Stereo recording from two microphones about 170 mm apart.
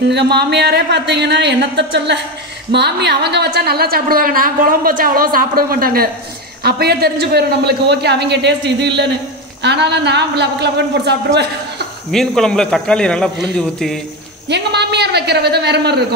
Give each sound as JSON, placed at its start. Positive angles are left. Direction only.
{"t": 0.1, "sound": "a woman's voice", "side_deg": -80}
{"t": 12.1, "sound": "a man's voice", "side_deg": 0}
{"t": 14.5, "sound": "a man's voice", "side_deg": -80}